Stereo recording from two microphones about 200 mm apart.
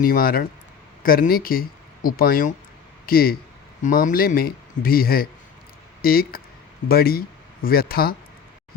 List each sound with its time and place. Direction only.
0.0 s speech: 45° left (ahead or behind)